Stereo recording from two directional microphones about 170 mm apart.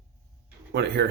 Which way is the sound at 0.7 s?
85° right.